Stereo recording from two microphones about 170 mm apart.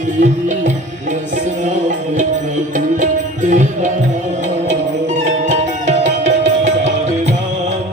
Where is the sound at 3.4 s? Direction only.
45° right (ahead or behind).